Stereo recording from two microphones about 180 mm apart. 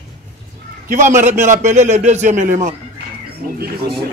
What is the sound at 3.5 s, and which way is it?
Speech, 60° right (ahead or behind).